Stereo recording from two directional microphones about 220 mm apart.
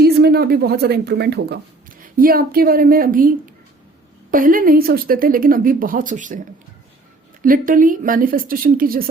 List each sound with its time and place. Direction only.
0.0 s a woman's voice: 45° right (ahead or behind)
7.4 s a woman's voice: 40° right (ahead or behind)